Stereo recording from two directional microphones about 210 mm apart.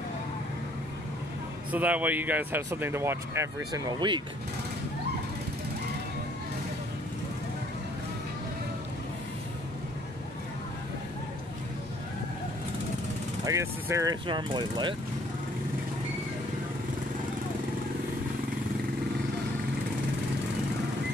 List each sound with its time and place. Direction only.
1.7 s speech: 5° right (ahead or behind)
13.5 s speech: 15° right (ahead or behind)